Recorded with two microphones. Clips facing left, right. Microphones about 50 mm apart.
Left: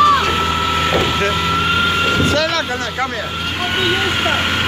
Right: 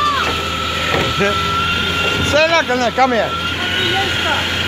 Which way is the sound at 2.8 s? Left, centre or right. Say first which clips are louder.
Right 7 dB; right.